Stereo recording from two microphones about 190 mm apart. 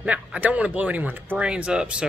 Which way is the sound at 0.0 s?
5° right (ahead or behind).